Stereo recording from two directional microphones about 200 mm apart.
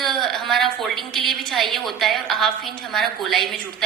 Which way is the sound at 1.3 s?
Centre (ahead or behind).